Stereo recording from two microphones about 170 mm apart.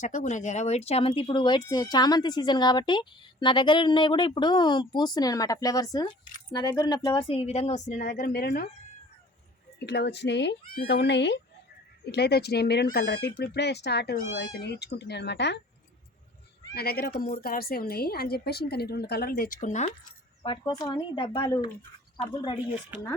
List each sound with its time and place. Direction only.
0.0 s speech: 45° left (ahead or behind); by 8.6 s 65° left (ahead or behind)
9.8 s speech: 80° left
12.1 s speech: 75° left (ahead or behind); by 15.6 s 90° left
16.7 s a woman's voice: 65° left (ahead or behind); by 19.9 s 45° left (ahead or behind)
20.4 s speech: 25° left (ahead or behind)